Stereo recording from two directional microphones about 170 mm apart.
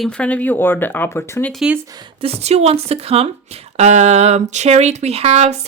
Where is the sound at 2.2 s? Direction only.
35° right (ahead or behind).